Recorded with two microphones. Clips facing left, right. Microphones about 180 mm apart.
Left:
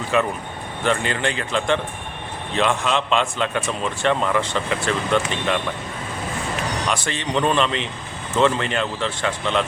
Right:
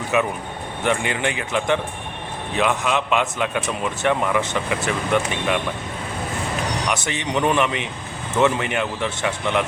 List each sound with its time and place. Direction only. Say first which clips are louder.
0.1 s a man's voice: even; 10° right (ahead or behind)
6.8 s a man's voice: even; 15° right (ahead or behind)